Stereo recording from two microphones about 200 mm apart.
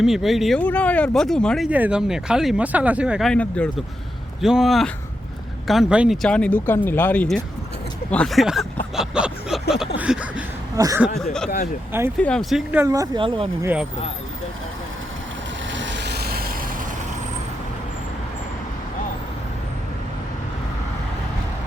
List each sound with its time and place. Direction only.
0.0 s speech: centre (ahead or behind)
9.0 s a sound: 5° right (ahead or behind)
10.8 s speech: 15° right (ahead or behind)
12.2 s speech: 5° left (ahead or behind); by 13.7 s 25° right (ahead or behind)
15.7 s vehicle: 65° right (ahead or behind); by 16.5 s 50° right (ahead or behind)